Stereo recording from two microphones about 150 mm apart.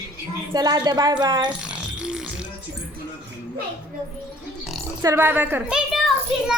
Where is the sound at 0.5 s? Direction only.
25° right (ahead or behind).